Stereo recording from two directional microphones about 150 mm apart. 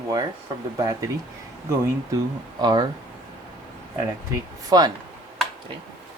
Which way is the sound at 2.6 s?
25° right (ahead or behind).